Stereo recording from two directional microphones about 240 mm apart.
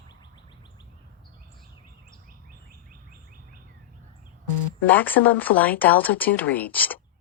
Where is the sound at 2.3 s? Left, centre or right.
Right.